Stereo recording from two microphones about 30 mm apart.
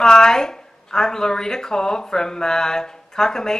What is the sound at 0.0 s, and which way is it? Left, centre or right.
A woman's voice, centre.